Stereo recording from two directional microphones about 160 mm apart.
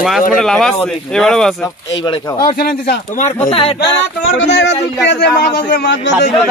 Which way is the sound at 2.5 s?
80° left.